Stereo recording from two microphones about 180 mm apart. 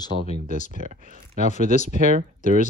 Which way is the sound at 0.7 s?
50° right (ahead or behind).